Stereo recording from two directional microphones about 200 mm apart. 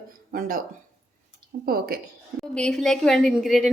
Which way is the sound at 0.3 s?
45° right (ahead or behind).